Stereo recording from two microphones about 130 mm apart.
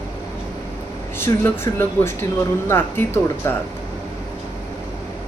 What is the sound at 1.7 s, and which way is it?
Speech, 30° left (ahead or behind).